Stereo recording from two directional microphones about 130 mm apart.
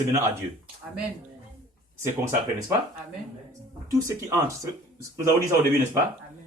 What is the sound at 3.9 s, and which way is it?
A man's voice, 25° right (ahead or behind).